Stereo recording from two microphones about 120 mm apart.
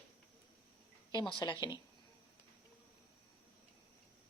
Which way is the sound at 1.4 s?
40° left (ahead or behind).